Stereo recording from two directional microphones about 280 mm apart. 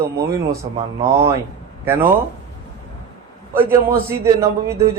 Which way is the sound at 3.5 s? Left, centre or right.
Centre.